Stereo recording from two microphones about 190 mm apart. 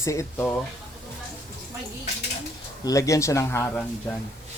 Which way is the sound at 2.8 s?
15° left (ahead or behind).